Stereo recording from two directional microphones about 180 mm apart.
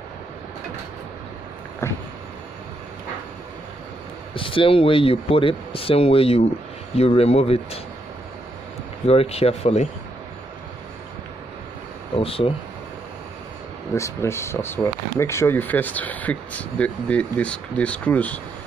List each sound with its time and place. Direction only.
4.3 s speech: 30° left (ahead or behind)
9.0 s speech: 35° left (ahead or behind)
12.2 s speech: 30° left (ahead or behind)
13.9 s speech: 15° left (ahead or behind)